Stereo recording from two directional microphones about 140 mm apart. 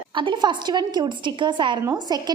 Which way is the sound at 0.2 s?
35° right (ahead or behind).